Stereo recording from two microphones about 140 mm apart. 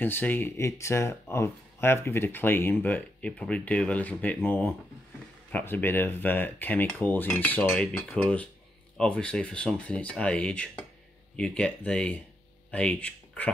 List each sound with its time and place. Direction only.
0.0 s speech: 15° left (ahead or behind)